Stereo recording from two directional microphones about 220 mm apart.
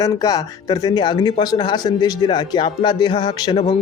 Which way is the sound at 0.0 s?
15° left (ahead or behind).